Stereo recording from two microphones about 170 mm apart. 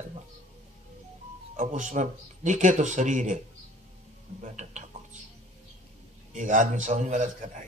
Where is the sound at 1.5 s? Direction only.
50° right (ahead or behind).